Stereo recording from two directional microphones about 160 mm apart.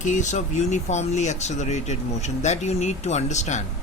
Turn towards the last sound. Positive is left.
turn(degrees=45)  # may be behind; listen again after turning